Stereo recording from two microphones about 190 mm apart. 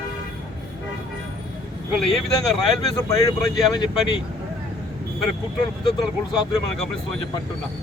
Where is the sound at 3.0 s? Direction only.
20° left (ahead or behind).